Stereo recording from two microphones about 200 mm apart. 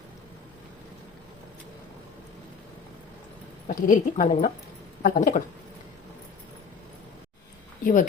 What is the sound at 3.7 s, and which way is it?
A woman's voice, 40° left (ahead or behind).